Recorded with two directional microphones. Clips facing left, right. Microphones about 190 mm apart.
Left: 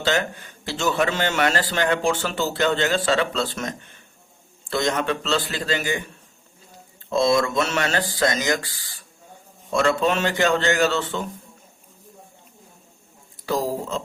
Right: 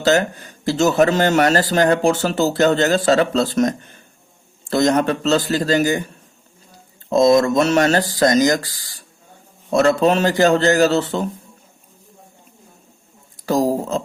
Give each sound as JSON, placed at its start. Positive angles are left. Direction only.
{"t": 0.0, "sound": "a man's voice", "side_deg": -40}
{"t": 7.1, "sound": "a man's voice", "side_deg": -40}
{"t": 13.4, "sound": "speech", "side_deg": -45}